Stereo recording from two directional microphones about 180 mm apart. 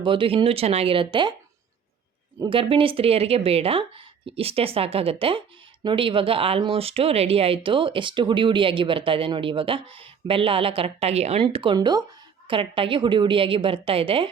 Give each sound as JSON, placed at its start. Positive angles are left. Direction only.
{"t": 0.0, "sound": "speech", "side_deg": -30}
{"t": 2.4, "sound": "speech", "side_deg": -30}